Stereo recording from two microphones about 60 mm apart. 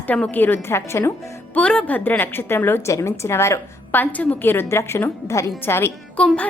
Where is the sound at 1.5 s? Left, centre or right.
Centre.